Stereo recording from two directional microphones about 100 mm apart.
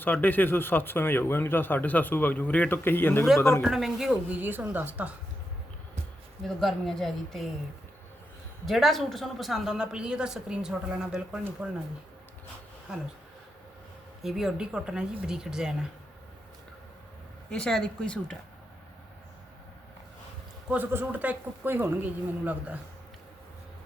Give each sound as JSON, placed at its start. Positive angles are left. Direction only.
{"t": 0.0, "sound": "speech", "side_deg": 20}
{"t": 3.6, "sound": "a woman's voice", "side_deg": 0}
{"t": 4.4, "sound": "speech", "side_deg": -20}
{"t": 6.5, "sound": "a woman's voice", "side_deg": 0}
{"t": 8.6, "sound": "a woman's voice", "side_deg": 0}
{"t": 14.2, "sound": "a woman's voice", "side_deg": -5}
{"t": 17.5, "sound": "speech", "side_deg": 5}
{"t": 20.9, "sound": "a woman's voice", "side_deg": -20}